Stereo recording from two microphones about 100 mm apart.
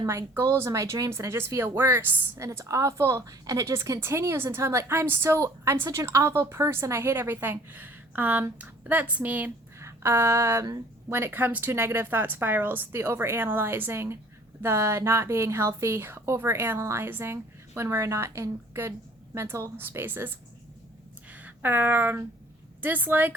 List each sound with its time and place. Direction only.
0.0 s a woman's voice: 30° right (ahead or behind)
2.5 s a woman's voice: 30° right (ahead or behind); by 9.5 s 15° right (ahead or behind)
9.8 s a sound: 25° right (ahead or behind)
11.1 s a woman's voice: 20° right (ahead or behind)
21.3 s a woman's voice: 20° right (ahead or behind)